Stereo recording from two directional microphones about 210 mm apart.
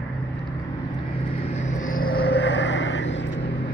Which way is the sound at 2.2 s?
55° left (ahead or behind).